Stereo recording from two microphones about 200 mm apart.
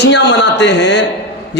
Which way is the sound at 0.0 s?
60° left (ahead or behind).